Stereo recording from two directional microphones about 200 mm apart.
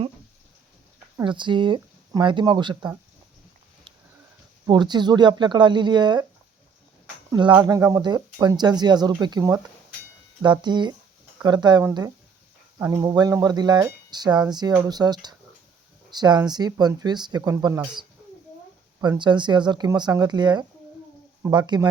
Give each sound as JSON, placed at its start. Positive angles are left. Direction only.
{"t": 1.2, "sound": "speech", "side_deg": -25}
{"t": 4.6, "sound": "speech", "side_deg": -20}
{"t": 7.3, "sound": "speech", "side_deg": -20}
{"t": 19.0, "sound": "speech", "side_deg": -20}